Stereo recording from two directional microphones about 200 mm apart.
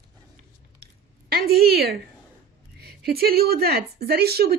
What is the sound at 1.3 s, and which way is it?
A woman's voice, 50° right (ahead or behind).